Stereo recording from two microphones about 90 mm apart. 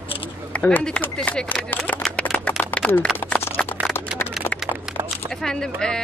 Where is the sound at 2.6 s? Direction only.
20° left (ahead or behind).